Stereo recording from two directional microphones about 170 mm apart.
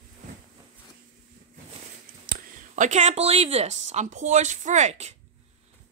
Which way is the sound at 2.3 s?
50° right (ahead or behind).